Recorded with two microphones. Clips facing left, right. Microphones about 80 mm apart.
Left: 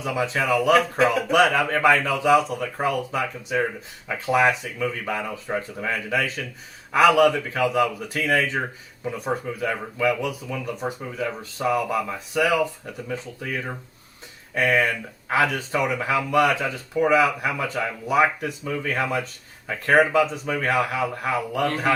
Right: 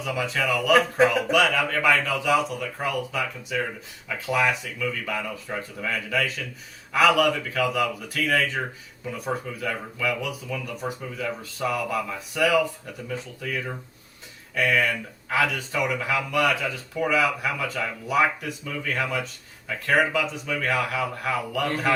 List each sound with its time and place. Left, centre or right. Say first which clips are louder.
0.0 s speech: left 2 dB; left